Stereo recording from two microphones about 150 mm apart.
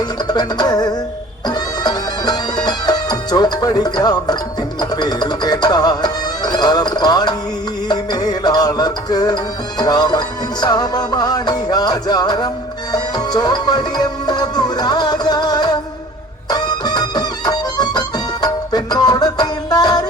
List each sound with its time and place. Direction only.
0.0 s music: 25° left (ahead or behind)